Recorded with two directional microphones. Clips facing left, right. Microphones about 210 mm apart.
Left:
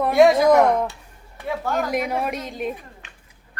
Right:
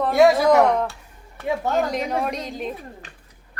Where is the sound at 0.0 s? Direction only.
Centre (ahead or behind).